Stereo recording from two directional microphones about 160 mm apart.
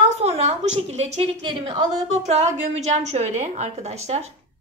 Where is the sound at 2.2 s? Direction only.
45° right (ahead or behind).